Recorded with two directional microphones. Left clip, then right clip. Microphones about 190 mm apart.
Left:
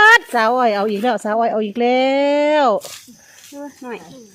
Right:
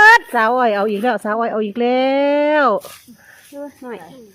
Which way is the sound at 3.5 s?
20° left (ahead or behind).